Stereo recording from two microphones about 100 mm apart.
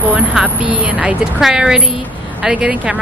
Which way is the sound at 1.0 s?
5° right (ahead or behind).